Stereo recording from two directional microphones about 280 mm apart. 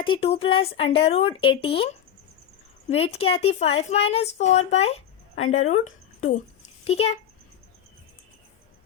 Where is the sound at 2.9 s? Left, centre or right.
Left.